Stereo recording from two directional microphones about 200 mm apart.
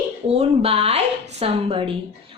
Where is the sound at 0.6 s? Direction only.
30° right (ahead or behind).